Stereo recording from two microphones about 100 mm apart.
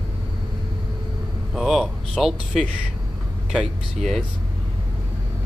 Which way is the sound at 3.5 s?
Centre (ahead or behind).